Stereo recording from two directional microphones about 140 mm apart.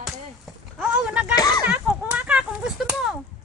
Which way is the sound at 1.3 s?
25° left (ahead or behind).